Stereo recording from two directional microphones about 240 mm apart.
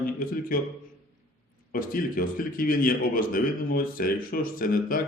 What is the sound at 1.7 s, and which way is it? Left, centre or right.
A man's voice, left.